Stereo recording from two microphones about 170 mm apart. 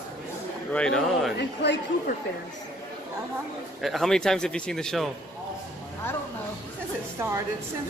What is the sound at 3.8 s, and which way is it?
Speech, centre (ahead or behind).